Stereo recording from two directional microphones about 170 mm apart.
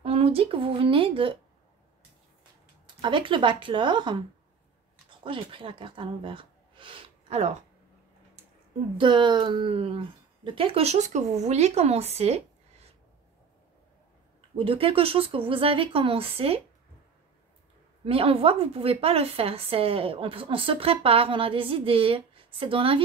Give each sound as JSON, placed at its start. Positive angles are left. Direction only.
{"t": 0.0, "sound": "a woman's voice", "side_deg": -35}
{"t": 3.0, "sound": "speech", "side_deg": -30}
{"t": 5.2, "sound": "speech", "side_deg": -30}
{"t": 8.9, "sound": "a woman's voice", "side_deg": -30}
{"t": 14.6, "sound": "a woman's voice", "side_deg": -30}
{"t": 18.0, "sound": "a woman's voice", "side_deg": -35}